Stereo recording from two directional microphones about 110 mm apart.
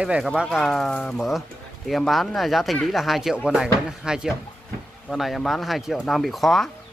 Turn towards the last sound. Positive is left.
turn(degrees=0)  # may be behind; listen again after turning